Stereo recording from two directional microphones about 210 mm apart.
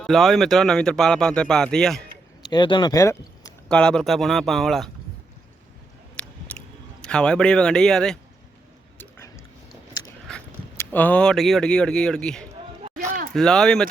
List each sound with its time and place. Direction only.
0.0 s speech: centre (ahead or behind)
2.4 s speech: 20° left (ahead or behind)
3.7 s speech: 5° left (ahead or behind)
6.2 s a sound: 5° left (ahead or behind)
7.0 s speech: 5° left (ahead or behind)
9.0 s a sound: 15° left (ahead or behind)
10.2 s speech: 5° left (ahead or behind)